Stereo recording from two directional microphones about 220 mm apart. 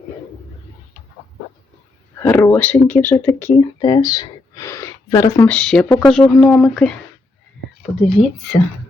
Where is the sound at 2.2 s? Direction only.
10° left (ahead or behind).